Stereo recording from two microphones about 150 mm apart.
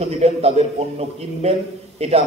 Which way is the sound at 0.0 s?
45° right (ahead or behind).